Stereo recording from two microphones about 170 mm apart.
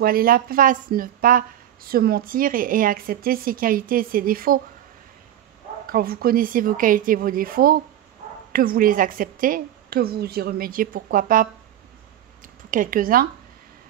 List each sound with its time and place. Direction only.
0.0 s speech: 60° right (ahead or behind)
5.9 s speech: 60° right (ahead or behind)
12.7 s speech: 55° right (ahead or behind)